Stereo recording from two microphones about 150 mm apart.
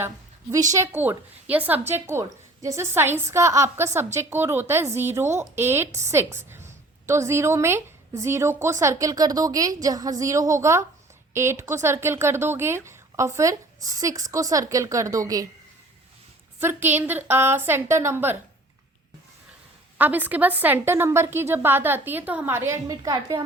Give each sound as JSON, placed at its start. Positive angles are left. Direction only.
{"t": 0.5, "sound": "a woman's voice", "side_deg": -20}
{"t": 16.6, "sound": "a woman's voice", "side_deg": -15}
{"t": 20.0, "sound": "a woman's voice", "side_deg": -10}